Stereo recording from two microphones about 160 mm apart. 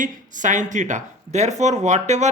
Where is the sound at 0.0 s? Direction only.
50° right (ahead or behind).